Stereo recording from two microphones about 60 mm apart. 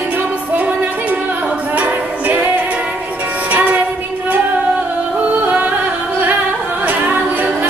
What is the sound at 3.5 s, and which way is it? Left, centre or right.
Music, right.